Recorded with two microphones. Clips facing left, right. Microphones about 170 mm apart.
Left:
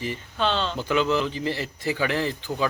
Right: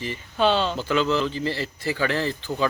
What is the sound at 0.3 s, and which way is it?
Speech, 10° right (ahead or behind).